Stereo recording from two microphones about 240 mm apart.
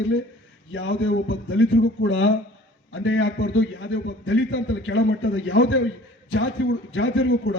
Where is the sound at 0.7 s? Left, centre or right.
Left.